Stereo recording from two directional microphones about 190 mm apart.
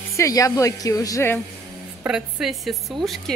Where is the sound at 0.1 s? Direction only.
15° left (ahead or behind).